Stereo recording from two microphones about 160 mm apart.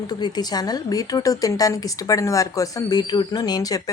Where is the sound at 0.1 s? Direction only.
25° left (ahead or behind).